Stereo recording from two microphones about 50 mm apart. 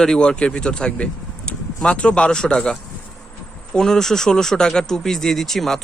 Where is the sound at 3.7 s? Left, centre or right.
Centre.